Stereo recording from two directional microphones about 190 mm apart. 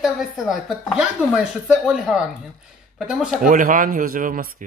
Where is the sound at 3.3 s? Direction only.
45° right (ahead or behind).